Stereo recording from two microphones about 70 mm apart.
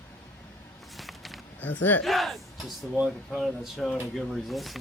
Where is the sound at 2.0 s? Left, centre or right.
Centre.